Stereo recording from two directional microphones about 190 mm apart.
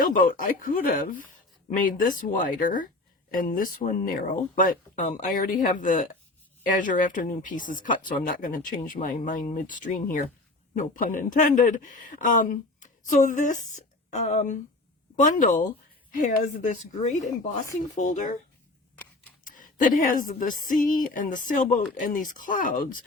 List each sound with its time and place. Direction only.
0.0 s speech: 45° left (ahead or behind)
19.5 s speech: 45° left (ahead or behind)